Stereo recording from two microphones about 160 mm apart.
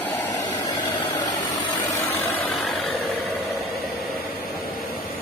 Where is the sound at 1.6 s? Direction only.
15° left (ahead or behind).